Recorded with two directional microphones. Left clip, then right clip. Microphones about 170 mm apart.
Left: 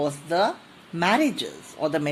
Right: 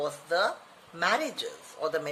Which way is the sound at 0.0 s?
30° left (ahead or behind).